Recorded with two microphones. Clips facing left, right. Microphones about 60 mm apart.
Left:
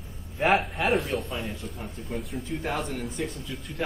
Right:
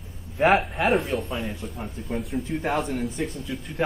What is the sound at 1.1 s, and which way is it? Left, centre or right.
Speech, centre.